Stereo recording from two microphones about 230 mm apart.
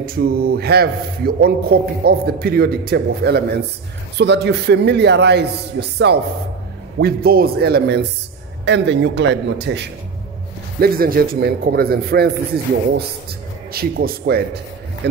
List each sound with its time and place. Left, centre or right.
0.0 s a man's voice: right
13.7 s a man's voice: right